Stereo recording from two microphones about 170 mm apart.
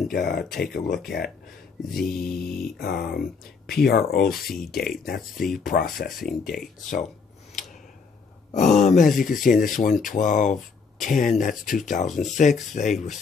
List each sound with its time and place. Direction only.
0.1 s speech: 60° left (ahead or behind)
2.0 s speech: 60° left (ahead or behind)
2.4 s mantra: 65° left (ahead or behind)
3.7 s speech: 65° left (ahead or behind)
4.5 s speech: centre (ahead or behind)
5.0 s speech: 60° left (ahead or behind)
6.1 s speech: centre (ahead or behind)
8.5 s speech: 45° left (ahead or behind)